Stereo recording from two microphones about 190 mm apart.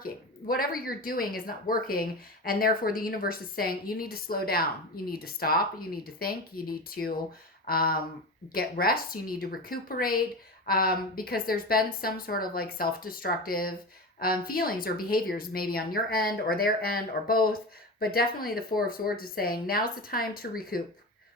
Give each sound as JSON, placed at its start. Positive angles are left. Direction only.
{"t": 0.0, "sound": "speech", "side_deg": 50}